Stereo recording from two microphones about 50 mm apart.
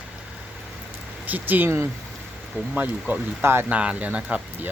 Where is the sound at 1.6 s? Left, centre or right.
Right.